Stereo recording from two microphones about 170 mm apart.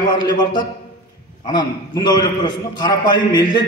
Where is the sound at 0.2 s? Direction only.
25° left (ahead or behind).